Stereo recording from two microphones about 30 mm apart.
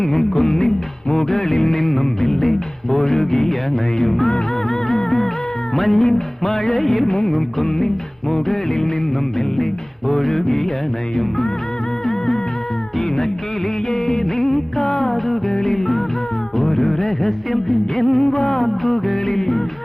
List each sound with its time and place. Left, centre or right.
0.3 s music: centre
6.0 s music: centre
10.1 s music: centre
13.9 s music: centre
18.3 s music: centre
18.6 s music: centre